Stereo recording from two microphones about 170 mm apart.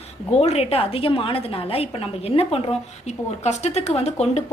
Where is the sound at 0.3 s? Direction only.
40° left (ahead or behind).